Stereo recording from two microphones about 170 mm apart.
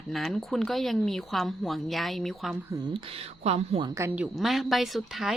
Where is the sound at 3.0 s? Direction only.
35° right (ahead or behind).